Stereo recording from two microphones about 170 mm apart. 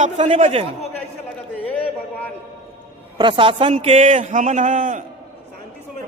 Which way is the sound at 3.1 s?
30° right (ahead or behind).